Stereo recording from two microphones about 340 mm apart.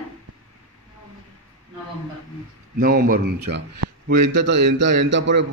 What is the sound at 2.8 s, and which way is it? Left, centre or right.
A man's voice, right.